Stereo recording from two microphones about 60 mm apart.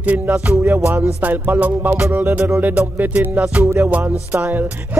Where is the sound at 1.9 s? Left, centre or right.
Right.